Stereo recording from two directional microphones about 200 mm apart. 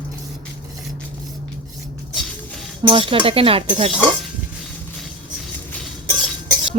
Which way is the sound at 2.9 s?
25° right (ahead or behind).